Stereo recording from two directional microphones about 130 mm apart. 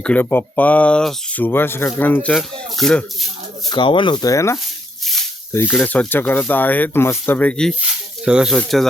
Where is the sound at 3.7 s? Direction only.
40° left (ahead or behind).